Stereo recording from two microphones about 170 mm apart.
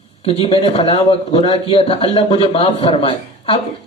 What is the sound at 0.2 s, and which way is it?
A man's voice, 35° left (ahead or behind).